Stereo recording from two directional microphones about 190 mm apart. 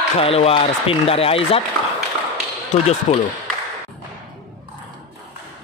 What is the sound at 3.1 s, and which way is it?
Speech, 35° left (ahead or behind).